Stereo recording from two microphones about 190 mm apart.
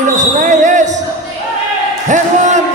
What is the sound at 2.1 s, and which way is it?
Music, 40° right (ahead or behind).